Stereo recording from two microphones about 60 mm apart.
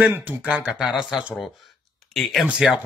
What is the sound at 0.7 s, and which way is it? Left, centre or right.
A man's voice, centre.